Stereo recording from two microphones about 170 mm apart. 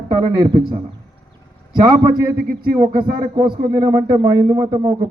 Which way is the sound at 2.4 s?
60° right (ahead or behind).